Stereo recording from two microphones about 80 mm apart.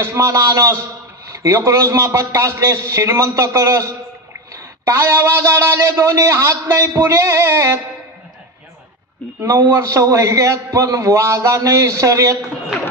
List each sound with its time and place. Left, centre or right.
0.0 s a man's voice: right
9.4 s a man's voice: right